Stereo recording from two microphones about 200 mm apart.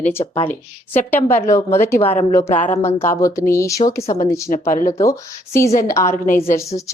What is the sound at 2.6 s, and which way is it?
A woman's voice, 10° left (ahead or behind).